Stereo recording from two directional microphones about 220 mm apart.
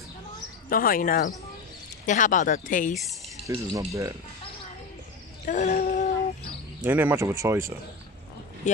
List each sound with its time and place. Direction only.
0.7 s speech: 40° left (ahead or behind)
3.4 s speech: 15° right (ahead or behind)
5.4 s a sound: 35° left (ahead or behind)
6.8 s speech: 10° right (ahead or behind)
8.6 s speech: 30° left (ahead or behind)